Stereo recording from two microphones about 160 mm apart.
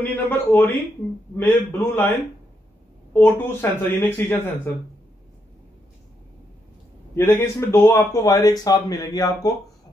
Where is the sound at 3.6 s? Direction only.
15° left (ahead or behind).